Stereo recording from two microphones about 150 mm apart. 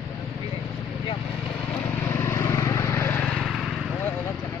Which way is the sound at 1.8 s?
15° left (ahead or behind).